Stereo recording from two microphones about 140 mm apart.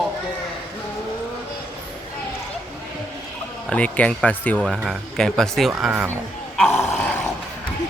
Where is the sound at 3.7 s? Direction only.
10° left (ahead or behind).